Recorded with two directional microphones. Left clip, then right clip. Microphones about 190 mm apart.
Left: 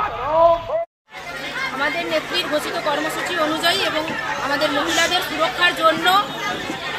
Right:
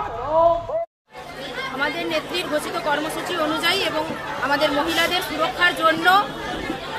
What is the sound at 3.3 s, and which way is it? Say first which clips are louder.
Speech: left 1 dB; 30° right (ahead or behind).